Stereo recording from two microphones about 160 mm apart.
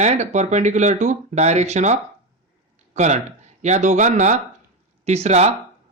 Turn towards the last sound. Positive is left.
turn(degrees=-45)  # may be behind; listen again after turning